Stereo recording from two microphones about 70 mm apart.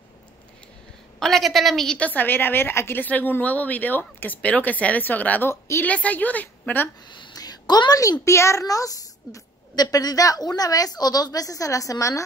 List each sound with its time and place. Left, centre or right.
1.2 s a woman's voice: centre
2.0 s a woman's voice: left
5.5 s a woman's voice: left
5.9 s a woman's voice: left
7.1 s a sound: left
8.0 s a woman's voice: left